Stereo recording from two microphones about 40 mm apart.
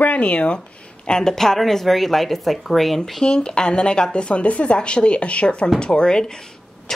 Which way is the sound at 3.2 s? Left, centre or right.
Left.